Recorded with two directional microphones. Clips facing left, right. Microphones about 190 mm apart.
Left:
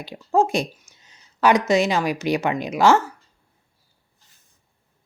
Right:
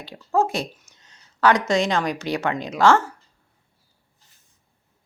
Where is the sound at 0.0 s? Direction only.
15° left (ahead or behind).